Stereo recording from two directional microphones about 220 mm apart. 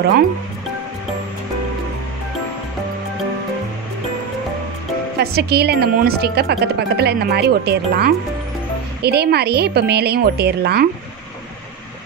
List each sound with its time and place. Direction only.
5.2 s speech: 45° right (ahead or behind)